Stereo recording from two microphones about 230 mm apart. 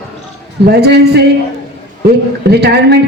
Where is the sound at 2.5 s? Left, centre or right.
Right.